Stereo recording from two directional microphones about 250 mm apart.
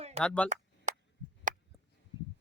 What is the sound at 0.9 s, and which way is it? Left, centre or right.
Chop, right.